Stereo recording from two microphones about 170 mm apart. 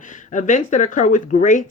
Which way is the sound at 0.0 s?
50° left (ahead or behind).